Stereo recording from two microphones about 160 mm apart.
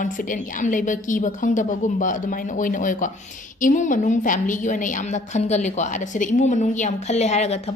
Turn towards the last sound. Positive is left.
turn(degrees=45)  # may be behind; listen again after turning